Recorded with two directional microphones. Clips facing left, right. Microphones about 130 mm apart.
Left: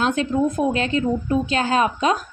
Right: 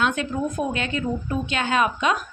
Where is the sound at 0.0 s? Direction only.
35° left (ahead or behind).